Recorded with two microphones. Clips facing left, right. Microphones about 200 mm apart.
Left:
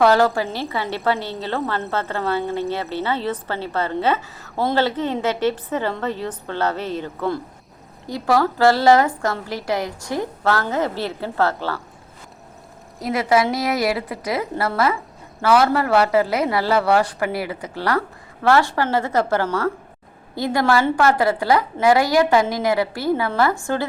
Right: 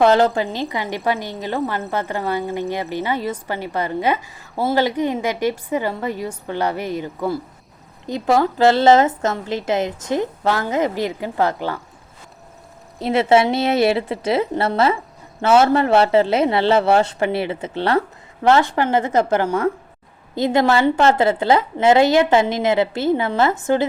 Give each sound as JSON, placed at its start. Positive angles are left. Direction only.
{"t": 0.0, "sound": "a woman's voice", "side_deg": -20}
{"t": 8.0, "sound": "a woman's voice", "side_deg": -20}
{"t": 13.0, "sound": "a woman's voice", "side_deg": -25}